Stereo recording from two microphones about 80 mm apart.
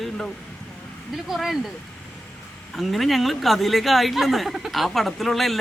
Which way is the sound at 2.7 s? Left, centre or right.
Centre.